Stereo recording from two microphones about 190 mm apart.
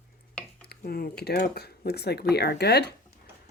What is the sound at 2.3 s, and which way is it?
Speech, 60° left (ahead or behind).